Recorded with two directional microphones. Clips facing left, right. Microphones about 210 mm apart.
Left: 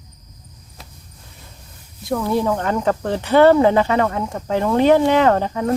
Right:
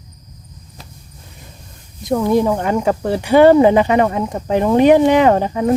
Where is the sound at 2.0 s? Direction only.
15° right (ahead or behind).